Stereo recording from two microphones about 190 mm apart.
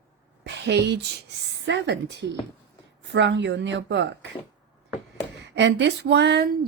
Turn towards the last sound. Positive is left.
turn(degrees=-60)  # may be behind; listen again after turning